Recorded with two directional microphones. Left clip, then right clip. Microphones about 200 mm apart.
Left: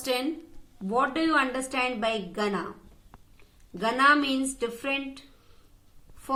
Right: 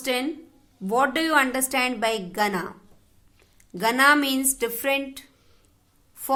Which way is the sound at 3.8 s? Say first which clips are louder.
Right 3 dB; 50° right (ahead or behind).